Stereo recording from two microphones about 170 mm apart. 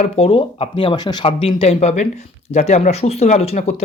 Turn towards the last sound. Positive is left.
turn(degrees=35)  # may be behind; listen again after turning